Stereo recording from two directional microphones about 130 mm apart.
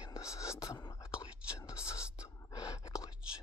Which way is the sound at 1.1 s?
10° right (ahead or behind).